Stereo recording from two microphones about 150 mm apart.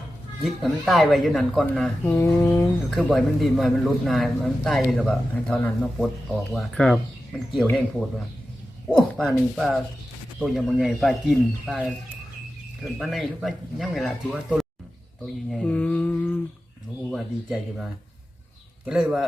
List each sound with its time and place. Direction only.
0.4 s a man's voice: centre (ahead or behind)
2.0 s mantra: 20° left (ahead or behind)
2.9 s a man's voice: centre (ahead or behind)
8.9 s a man's voice: 5° left (ahead or behind)
12.8 s a man's voice: centre (ahead or behind)
15.4 s mantra: 5° left (ahead or behind)
17.1 s a man's voice: 5° right (ahead or behind)
18.9 s a man's voice: 5° right (ahead or behind)